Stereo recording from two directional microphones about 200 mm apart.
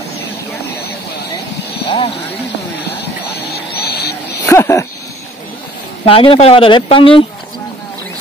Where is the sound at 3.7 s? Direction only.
55° left (ahead or behind).